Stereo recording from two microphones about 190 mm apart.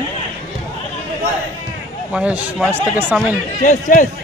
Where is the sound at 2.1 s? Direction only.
5° right (ahead or behind).